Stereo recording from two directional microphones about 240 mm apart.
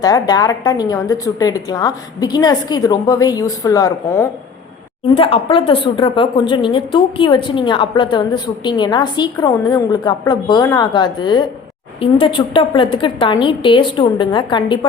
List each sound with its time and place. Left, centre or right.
0.0 s a woman's voice: centre
5.1 s a woman's voice: left